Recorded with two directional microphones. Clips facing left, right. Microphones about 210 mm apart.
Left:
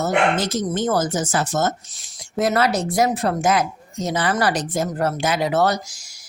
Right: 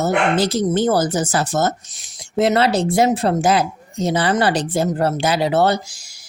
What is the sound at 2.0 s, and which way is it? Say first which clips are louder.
Speech: right 6 dB; 25° right (ahead or behind).